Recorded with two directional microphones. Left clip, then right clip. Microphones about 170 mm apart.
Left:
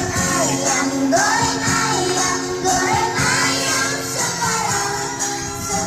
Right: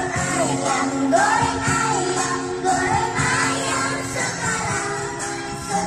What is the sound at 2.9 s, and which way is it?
Music, 15° left (ahead or behind).